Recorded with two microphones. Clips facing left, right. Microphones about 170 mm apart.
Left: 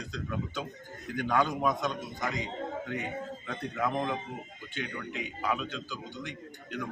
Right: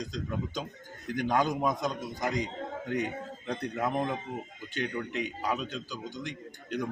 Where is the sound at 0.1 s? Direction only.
35° right (ahead or behind).